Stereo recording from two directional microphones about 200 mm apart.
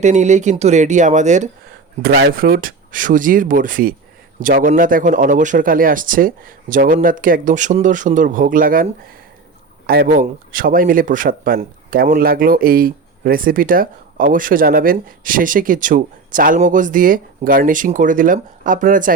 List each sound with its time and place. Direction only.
0.0 s speech: 35° right (ahead or behind)
2.0 s a man's voice: 50° right (ahead or behind)